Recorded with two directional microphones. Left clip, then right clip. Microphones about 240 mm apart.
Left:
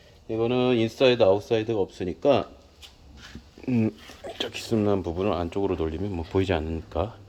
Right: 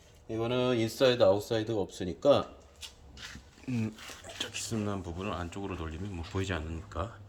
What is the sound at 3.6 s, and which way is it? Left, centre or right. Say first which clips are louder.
Speech: left 10 dB; left.